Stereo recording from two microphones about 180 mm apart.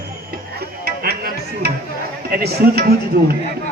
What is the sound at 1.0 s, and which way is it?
Music, 60° right (ahead or behind).